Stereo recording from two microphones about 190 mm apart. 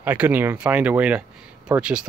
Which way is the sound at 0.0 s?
10° right (ahead or behind).